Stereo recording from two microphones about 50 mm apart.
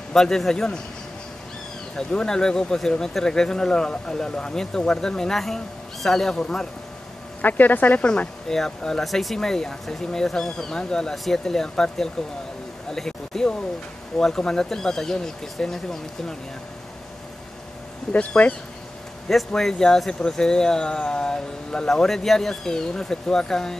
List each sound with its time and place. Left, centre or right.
0.1 s speech: centre
2.0 s speech: centre
7.4 s speech: left
8.0 s speech: centre
9.0 s speech: centre
18.4 s speech: left
19.2 s speech: centre